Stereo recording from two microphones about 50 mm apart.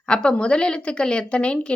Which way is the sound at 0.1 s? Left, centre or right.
Centre.